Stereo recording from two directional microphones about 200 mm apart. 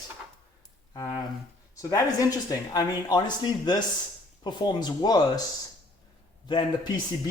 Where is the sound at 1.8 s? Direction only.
15° left (ahead or behind).